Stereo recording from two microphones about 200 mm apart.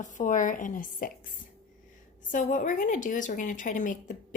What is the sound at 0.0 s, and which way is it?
Speech, 40° left (ahead or behind).